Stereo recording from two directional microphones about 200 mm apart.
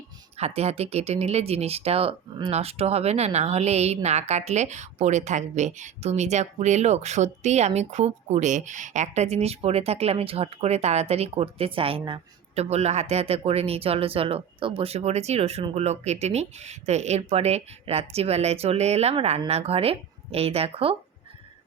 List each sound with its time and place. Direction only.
0.3 s speech: 30° right (ahead or behind)